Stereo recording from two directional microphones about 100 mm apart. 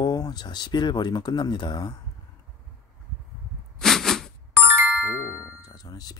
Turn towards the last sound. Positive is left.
turn(degrees=40)  # may be behind; listen again after turning